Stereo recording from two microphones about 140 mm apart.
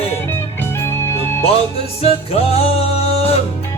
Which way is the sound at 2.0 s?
45° left (ahead or behind).